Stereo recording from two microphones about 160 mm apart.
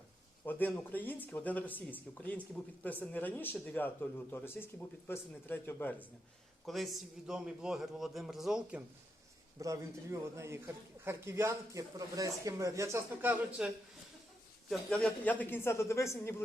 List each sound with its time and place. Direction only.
0.4 s speech: 10° left (ahead or behind)
6.7 s a man's voice: centre (ahead or behind)
9.6 s a man's voice: 20° right (ahead or behind)
13.6 s a man's voice: 5° right (ahead or behind)
14.7 s speech: 5° left (ahead or behind)